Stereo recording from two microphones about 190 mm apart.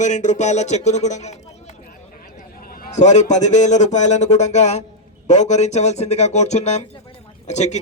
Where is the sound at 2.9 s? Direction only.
40° left (ahead or behind).